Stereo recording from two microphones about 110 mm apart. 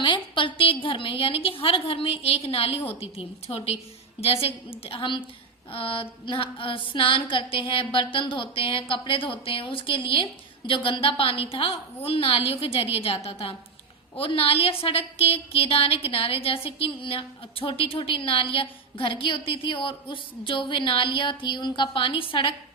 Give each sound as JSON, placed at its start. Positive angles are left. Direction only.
{"t": 0.0, "sound": "a woman's voice", "side_deg": 50}